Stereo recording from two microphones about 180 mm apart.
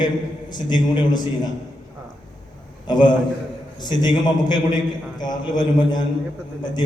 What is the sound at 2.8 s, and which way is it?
A man's voice, 25° left (ahead or behind).